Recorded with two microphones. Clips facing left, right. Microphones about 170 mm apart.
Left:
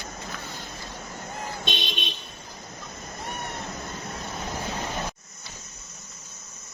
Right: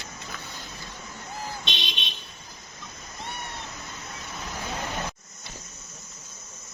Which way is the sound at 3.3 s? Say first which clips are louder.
Left 4 dB; 45° left (ahead or behind).